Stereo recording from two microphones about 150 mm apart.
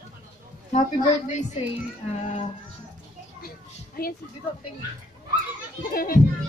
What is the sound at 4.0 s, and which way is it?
Speech, 80° left.